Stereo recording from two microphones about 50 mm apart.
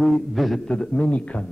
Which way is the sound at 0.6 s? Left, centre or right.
Centre.